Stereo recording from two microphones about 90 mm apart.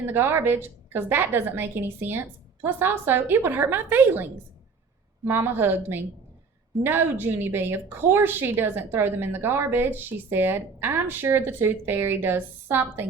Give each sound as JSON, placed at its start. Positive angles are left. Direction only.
{"t": 0.0, "sound": "a woman's voice", "side_deg": -25}